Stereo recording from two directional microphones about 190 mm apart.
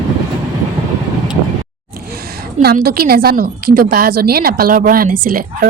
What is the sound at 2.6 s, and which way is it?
A woman's voice, 55° right (ahead or behind).